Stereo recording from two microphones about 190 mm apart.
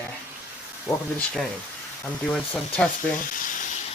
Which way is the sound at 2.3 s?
5° left (ahead or behind).